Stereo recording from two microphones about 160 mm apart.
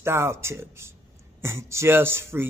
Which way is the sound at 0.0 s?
15° right (ahead or behind).